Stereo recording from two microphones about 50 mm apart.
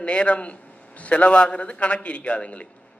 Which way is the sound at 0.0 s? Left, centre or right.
Left.